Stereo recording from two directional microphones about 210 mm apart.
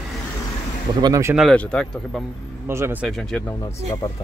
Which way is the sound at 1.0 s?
15° right (ahead or behind).